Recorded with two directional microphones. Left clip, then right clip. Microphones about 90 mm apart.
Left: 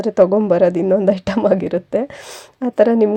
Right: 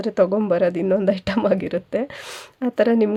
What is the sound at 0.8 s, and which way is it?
A woman's voice, 30° left (ahead or behind).